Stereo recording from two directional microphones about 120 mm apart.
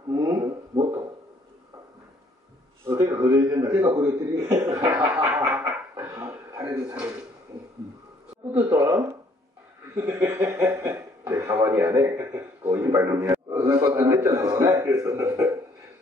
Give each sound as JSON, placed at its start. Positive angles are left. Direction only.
{"t": 0.1, "sound": "speech", "side_deg": -30}
{"t": 2.8, "sound": "a man's voice", "side_deg": -25}
{"t": 5.1, "sound": "a sound", "side_deg": -15}
{"t": 6.9, "sound": "speech", "side_deg": -10}
{"t": 8.6, "sound": "a man's voice", "side_deg": -25}
{"t": 13.6, "sound": "a man's voice", "side_deg": -35}